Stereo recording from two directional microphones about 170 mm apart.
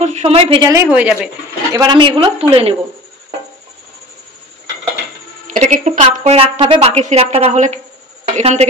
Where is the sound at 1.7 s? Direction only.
25° right (ahead or behind).